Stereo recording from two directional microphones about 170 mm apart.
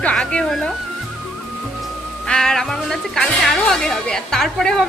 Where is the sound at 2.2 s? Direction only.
5° left (ahead or behind).